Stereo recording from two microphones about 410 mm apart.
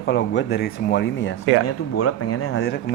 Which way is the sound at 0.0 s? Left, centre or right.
Left.